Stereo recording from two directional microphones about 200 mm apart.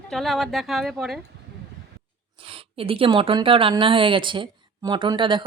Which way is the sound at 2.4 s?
30° right (ahead or behind).